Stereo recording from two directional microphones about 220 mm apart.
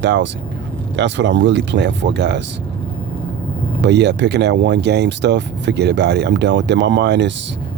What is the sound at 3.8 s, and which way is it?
Speech, 50° right (ahead or behind).